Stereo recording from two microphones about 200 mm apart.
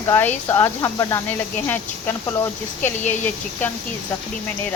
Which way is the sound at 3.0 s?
35° left (ahead or behind).